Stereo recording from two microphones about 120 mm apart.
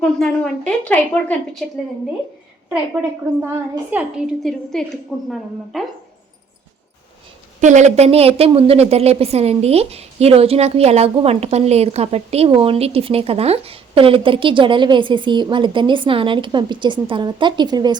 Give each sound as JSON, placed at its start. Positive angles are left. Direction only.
{"t": 0.0, "sound": "a woman's voice", "side_deg": 5}
{"t": 3.9, "sound": "a woman's voice", "side_deg": -15}
{"t": 4.4, "sound": "a woman's voice", "side_deg": 5}
{"t": 7.6, "sound": "a woman's voice", "side_deg": -85}